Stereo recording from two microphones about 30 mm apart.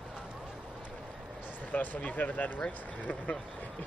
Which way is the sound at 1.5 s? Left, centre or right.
Left.